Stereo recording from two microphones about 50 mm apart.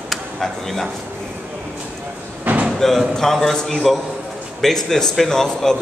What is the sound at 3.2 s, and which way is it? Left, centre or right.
Speech, centre.